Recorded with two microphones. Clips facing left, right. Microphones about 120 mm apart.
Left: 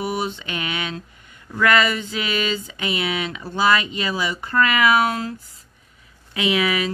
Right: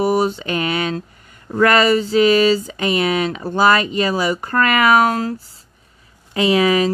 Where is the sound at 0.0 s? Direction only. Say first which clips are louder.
Right 8 dB; 40° right (ahead or behind).